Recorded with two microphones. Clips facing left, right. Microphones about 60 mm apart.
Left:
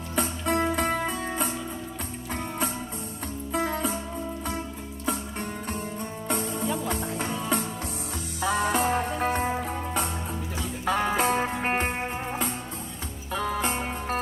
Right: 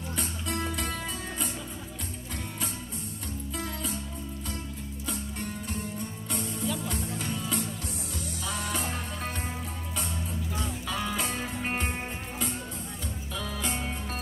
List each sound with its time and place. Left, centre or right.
0.1 s music: left
3.5 s music: left
5.0 s music: left
13.3 s music: left